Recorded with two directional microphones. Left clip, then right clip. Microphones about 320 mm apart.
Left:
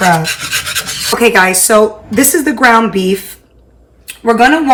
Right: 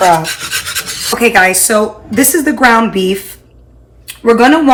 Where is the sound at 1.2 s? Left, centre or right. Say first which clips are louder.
Even; centre.